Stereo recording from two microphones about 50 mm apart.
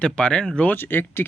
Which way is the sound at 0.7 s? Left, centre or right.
Left.